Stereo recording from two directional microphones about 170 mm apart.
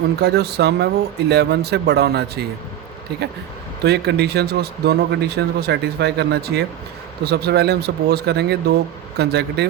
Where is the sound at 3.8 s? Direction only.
75° right (ahead or behind).